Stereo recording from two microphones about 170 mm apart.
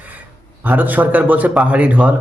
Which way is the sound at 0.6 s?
10° right (ahead or behind).